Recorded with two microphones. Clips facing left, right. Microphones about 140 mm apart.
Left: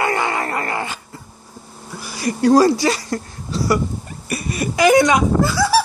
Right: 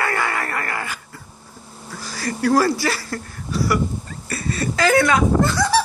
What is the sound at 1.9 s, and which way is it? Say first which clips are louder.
Speech: left 4 dB; 15° left (ahead or behind).